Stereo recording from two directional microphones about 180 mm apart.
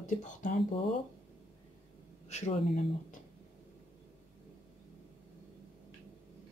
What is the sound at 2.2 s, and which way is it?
Speech, 40° left (ahead or behind).